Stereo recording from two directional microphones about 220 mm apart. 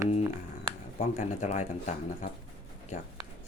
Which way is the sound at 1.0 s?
30° left (ahead or behind).